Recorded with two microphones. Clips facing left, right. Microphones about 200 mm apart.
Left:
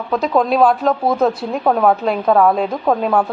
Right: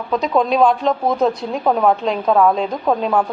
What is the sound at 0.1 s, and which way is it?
A woman's voice, centre (ahead or behind).